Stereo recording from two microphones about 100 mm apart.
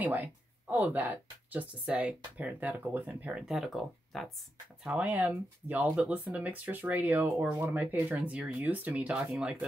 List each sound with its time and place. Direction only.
0.0 s a sound: 15° right (ahead or behind)
0.9 s speech: 20° right (ahead or behind); by 4.3 s centre (ahead or behind)
4.8 s speech: 15° right (ahead or behind)